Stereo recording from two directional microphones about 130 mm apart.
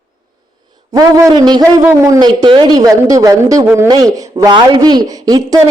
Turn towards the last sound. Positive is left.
turn(degrees=-30)  # may be behind; listen again after turning